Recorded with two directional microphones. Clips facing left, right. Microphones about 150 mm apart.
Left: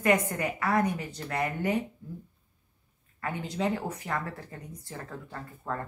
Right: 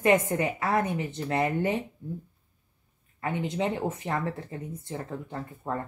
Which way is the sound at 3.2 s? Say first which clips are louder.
Right 2 dB; 20° right (ahead or behind).